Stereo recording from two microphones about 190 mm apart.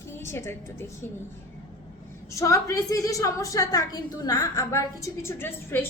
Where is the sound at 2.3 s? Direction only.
15° left (ahead or behind).